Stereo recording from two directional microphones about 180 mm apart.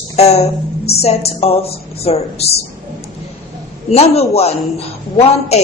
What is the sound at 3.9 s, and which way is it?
Speech, 35° left (ahead or behind).